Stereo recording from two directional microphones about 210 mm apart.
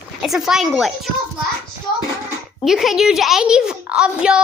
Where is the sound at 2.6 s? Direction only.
Centre (ahead or behind).